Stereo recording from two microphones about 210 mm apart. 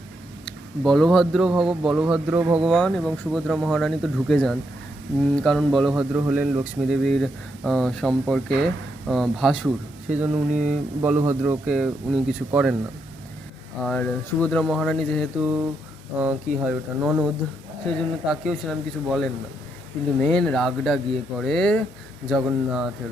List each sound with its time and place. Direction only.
0.9 s speech: centre (ahead or behind)
13.8 s speech: 5° left (ahead or behind)